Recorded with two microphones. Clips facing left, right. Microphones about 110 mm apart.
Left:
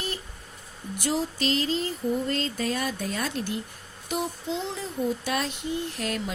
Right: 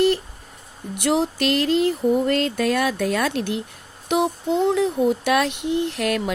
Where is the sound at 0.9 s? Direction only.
70° right (ahead or behind).